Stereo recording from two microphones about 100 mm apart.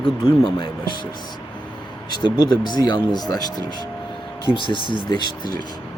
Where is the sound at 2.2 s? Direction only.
45° left (ahead or behind).